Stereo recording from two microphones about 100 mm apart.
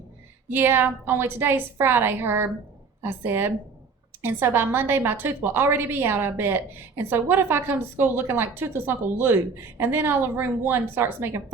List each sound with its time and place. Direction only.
0.5 s a woman's voice: 20° right (ahead or behind)